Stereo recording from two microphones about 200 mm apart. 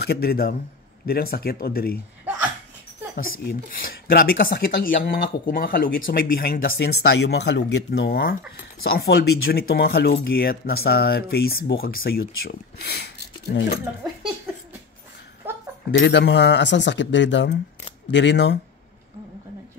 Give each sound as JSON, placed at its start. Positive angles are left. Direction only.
{"t": 0.0, "sound": "speech", "side_deg": 50}
{"t": 3.2, "sound": "speech", "side_deg": 45}
{"t": 15.9, "sound": "a man's voice", "side_deg": 60}